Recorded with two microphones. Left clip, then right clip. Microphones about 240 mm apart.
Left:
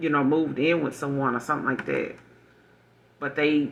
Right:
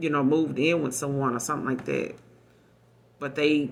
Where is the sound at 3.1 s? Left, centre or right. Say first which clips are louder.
Even; right.